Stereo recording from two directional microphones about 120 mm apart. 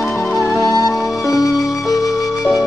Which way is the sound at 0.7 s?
30° left (ahead or behind).